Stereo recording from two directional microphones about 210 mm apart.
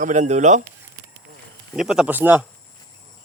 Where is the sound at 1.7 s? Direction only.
Centre (ahead or behind).